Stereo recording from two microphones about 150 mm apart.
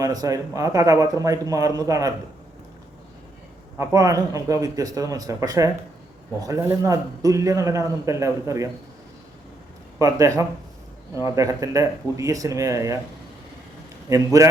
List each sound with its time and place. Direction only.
0.0 s a man's voice: 25° right (ahead or behind)
3.8 s a man's voice: 20° right (ahead or behind)
10.0 s a man's voice: 20° right (ahead or behind)
14.1 s a man's voice: 25° right (ahead or behind)